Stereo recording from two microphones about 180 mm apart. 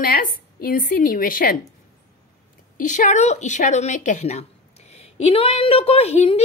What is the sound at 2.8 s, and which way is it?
A woman's voice, 45° left (ahead or behind).